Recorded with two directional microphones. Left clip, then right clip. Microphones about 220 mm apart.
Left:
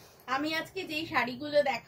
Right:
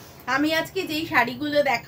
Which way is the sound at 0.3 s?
15° right (ahead or behind).